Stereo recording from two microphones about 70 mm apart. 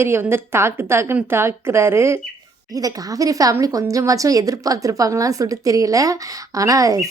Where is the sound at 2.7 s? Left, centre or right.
Right.